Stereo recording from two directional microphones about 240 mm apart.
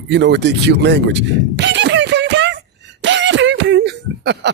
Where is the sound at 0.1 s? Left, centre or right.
Right.